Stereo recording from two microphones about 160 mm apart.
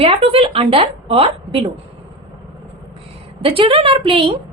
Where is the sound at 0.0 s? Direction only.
35° right (ahead or behind).